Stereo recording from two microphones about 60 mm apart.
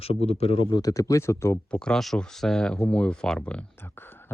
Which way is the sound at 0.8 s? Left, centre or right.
Left.